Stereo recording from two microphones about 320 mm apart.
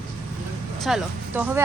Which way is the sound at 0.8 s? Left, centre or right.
Centre.